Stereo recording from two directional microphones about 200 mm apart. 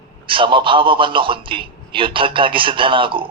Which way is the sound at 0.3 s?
25° right (ahead or behind).